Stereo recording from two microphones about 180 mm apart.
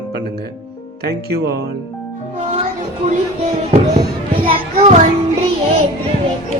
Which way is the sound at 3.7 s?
30° right (ahead or behind).